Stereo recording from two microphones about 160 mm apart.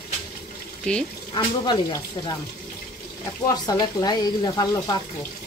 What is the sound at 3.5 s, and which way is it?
Speech, 20° left (ahead or behind).